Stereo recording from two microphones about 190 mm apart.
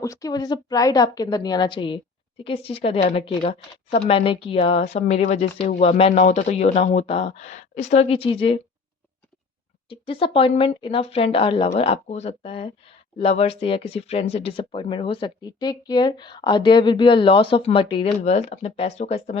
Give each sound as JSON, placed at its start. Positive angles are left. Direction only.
{"t": 0.0, "sound": "a woman's voice", "side_deg": 15}
{"t": 9.9, "sound": "a woman's voice", "side_deg": 25}